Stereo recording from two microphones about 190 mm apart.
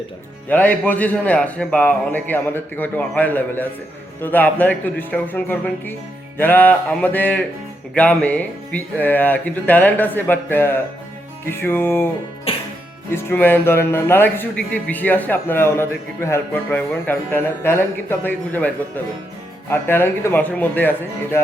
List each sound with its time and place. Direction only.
0.4 s speech: 10° left (ahead or behind)
12.5 s music: 30° left (ahead or behind)
13.1 s speech: 10° left (ahead or behind)
19.7 s speech: 10° left (ahead or behind)